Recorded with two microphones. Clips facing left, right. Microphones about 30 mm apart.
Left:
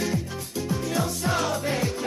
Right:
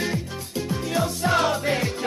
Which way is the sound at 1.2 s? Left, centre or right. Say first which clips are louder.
Right 4 dB; right.